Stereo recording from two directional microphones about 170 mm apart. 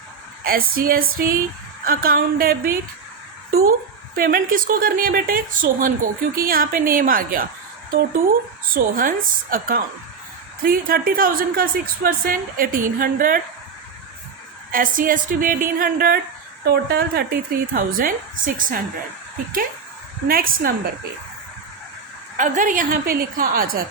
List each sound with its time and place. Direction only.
0.4 s a woman's voice: 60° right (ahead or behind)
8.7 s a woman's voice: 55° right (ahead or behind)
14.7 s a woman's voice: 55° right (ahead or behind)
20.2 s a woman's voice: 60° right (ahead or behind)
22.4 s speech: 50° right (ahead or behind)